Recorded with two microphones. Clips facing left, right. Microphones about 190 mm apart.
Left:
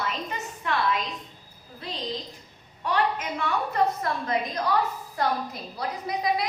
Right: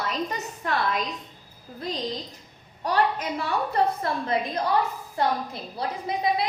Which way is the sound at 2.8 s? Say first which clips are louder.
Right 2 dB; 35° right (ahead or behind).